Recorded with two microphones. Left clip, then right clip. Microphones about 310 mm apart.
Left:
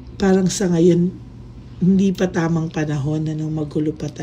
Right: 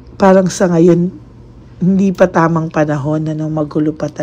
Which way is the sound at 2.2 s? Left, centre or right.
Centre.